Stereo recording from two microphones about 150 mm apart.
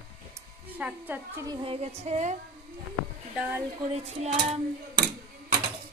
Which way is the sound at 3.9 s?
45° right (ahead or behind).